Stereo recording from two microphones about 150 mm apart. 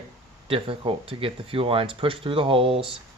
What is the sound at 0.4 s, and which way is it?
Speech, 35° right (ahead or behind).